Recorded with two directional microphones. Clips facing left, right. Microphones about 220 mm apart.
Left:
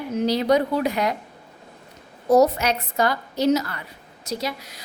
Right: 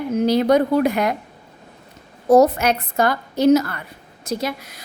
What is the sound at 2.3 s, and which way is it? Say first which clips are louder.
A woman's voice: right 3 dB; 50° right (ahead or behind).